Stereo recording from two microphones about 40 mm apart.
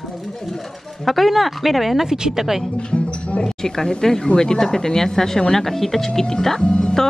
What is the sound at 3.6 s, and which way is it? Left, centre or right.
Speech, centre.